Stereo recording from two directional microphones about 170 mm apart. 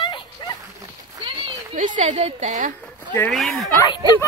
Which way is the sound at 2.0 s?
40° right (ahead or behind).